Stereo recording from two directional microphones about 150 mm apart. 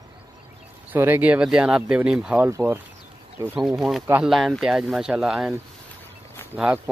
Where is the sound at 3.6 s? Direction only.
Centre (ahead or behind).